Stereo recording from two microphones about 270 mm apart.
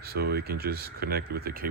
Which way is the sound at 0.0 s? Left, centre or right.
Right.